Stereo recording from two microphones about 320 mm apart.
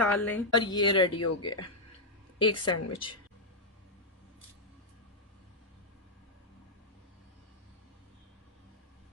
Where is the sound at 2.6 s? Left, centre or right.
Left.